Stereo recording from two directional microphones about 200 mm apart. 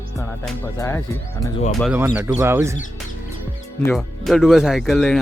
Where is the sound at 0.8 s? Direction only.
15° left (ahead or behind).